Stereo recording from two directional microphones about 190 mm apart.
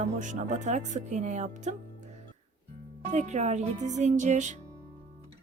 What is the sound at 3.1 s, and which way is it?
Speech, 40° right (ahead or behind).